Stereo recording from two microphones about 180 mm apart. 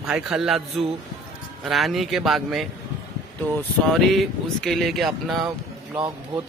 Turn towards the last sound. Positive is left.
turn(degrees=-25)  # may be behind; listen again after turning